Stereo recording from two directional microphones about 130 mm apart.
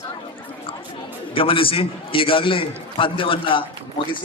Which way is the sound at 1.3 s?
45° left (ahead or behind).